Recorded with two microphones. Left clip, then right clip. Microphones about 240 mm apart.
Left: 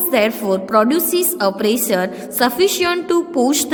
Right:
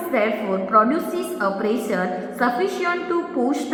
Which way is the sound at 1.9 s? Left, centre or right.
Left.